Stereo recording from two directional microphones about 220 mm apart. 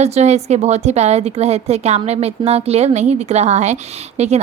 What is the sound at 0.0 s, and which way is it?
A woman's voice, 30° right (ahead or behind).